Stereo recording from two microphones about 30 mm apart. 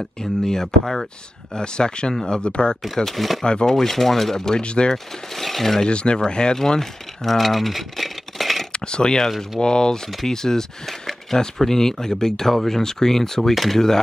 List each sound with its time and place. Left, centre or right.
0.2 s speech: left
3.1 s speech: centre
3.4 s speech: left
3.7 s speech: centre
4.6 s speech: left
4.9 s speech: centre
5.9 s speech: left
6.6 s a sound: centre
8.7 s speech: left